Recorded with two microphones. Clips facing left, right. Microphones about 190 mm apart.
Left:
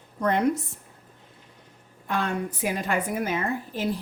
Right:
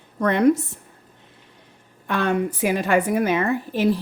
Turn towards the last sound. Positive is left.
turn(degrees=-75)  # may be behind; listen again after turning